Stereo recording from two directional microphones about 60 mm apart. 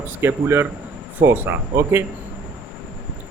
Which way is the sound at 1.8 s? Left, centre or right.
Right.